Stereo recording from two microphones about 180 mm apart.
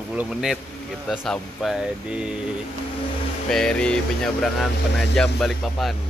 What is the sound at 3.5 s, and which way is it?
Speech, 5° left (ahead or behind).